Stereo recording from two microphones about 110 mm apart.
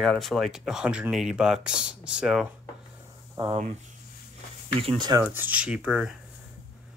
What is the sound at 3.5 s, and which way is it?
Speech, 90° right.